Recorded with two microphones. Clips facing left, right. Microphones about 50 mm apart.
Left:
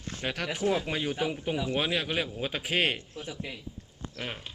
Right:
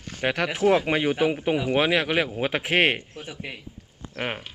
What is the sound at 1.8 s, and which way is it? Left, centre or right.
Speech, right.